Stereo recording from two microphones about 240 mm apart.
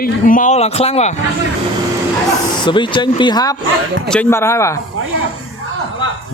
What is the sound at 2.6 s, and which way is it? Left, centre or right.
A man's voice, centre.